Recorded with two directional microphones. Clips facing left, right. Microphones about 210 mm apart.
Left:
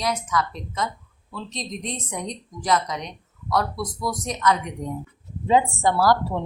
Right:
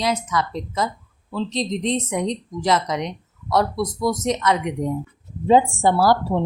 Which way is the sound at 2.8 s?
90° right.